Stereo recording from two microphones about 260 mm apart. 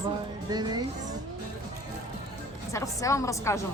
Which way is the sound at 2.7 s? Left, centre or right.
Centre.